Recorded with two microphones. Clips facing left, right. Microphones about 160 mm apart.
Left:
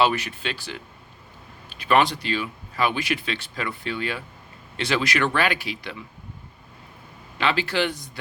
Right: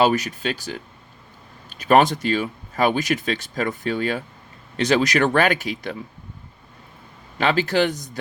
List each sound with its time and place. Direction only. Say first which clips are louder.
0.0 s speech: right 3 dB; 40° right (ahead or behind)
7.3 s speech: right 4 dB; 45° right (ahead or behind)